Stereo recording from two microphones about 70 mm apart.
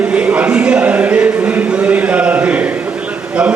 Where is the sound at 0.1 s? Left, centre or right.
Centre.